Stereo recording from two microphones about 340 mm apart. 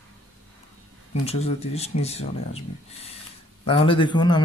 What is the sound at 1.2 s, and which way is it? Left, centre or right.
A man's voice, centre.